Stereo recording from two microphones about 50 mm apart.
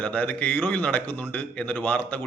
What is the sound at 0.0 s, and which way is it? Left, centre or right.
A man's voice, left.